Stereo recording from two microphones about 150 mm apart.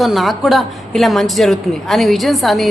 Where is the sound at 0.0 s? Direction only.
Centre (ahead or behind).